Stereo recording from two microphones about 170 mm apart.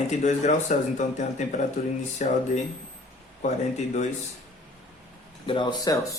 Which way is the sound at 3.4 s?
45° left (ahead or behind).